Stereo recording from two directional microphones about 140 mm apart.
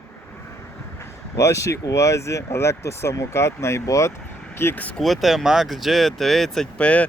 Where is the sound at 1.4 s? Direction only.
20° left (ahead or behind).